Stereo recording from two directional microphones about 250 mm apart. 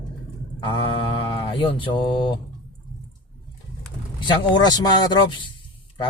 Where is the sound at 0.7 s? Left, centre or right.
Centre.